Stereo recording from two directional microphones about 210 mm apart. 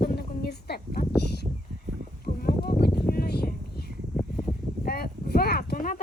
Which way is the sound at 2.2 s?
45° left (ahead or behind).